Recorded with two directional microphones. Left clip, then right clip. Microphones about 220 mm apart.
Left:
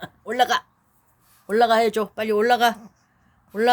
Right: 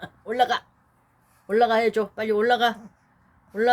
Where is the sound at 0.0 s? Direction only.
30° left (ahead or behind).